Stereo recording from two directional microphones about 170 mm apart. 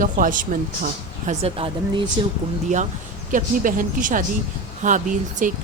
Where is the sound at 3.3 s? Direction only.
50° right (ahead or behind).